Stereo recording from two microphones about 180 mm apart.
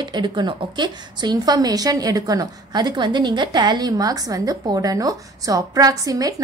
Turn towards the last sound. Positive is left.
turn(degrees=-20)  # may be behind; listen again after turning